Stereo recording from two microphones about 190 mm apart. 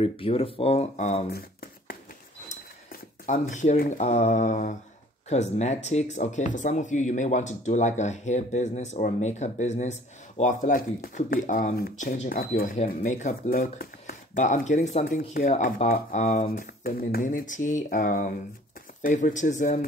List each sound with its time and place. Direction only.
0.0 s speech: 30° left (ahead or behind)
1.3 s a sound: 50° left (ahead or behind)
2.5 s speech: 40° left (ahead or behind)
16.4 s speech: 50° left (ahead or behind)